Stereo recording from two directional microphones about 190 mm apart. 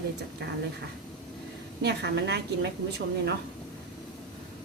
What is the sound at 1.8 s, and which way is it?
Speech, 60° right (ahead or behind).